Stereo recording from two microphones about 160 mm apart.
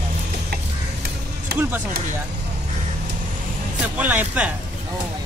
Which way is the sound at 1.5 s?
75° right (ahead or behind).